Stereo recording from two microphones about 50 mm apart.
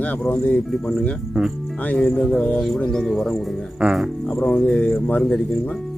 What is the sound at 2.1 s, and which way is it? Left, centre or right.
Speech, left.